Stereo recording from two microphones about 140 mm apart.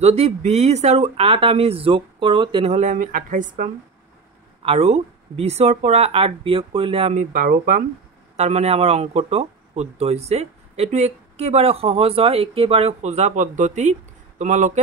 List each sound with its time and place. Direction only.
0.0 s speech: 50° right (ahead or behind)
2.7 s speech: 65° right (ahead or behind)
4.6 s speech: 50° right (ahead or behind); by 7.8 s 70° right (ahead or behind)
8.4 s speech: 50° right (ahead or behind)